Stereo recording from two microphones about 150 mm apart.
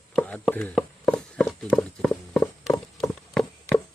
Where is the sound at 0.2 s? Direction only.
10° left (ahead or behind).